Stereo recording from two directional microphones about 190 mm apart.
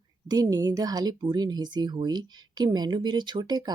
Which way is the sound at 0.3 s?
20° right (ahead or behind).